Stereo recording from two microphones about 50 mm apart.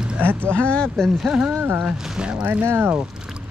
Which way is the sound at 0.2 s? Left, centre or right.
Right.